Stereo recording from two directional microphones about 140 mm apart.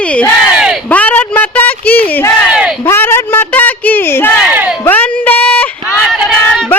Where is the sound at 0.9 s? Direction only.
10° left (ahead or behind).